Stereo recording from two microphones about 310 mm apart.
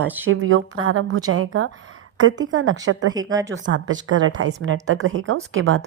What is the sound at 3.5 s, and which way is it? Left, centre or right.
A woman's voice, right.